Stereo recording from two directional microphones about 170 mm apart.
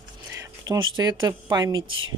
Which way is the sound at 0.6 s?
25° right (ahead or behind).